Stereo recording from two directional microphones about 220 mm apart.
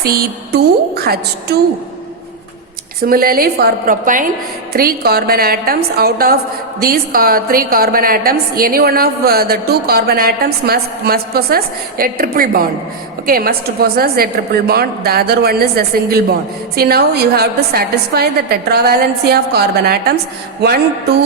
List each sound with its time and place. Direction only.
0.0 s a woman's voice: 45° right (ahead or behind)
3.0 s a woman's voice: 40° right (ahead or behind)